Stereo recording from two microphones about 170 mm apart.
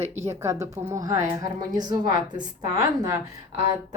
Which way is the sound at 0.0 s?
40° right (ahead or behind).